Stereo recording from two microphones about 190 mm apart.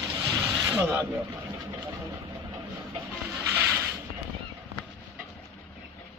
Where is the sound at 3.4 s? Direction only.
15° right (ahead or behind).